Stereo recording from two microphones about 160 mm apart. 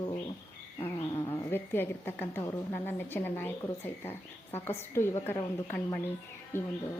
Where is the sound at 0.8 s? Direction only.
35° left (ahead or behind).